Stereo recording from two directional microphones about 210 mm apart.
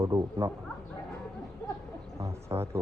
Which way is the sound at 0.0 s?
15° right (ahead or behind).